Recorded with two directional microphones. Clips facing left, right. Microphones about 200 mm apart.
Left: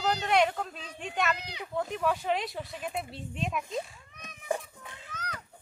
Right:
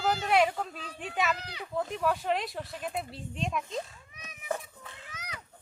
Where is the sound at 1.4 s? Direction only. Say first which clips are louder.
Left 1 dB; 15° left (ahead or behind).